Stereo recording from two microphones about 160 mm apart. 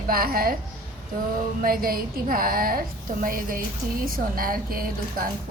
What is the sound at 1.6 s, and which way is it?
A woman's voice, 65° right (ahead or behind).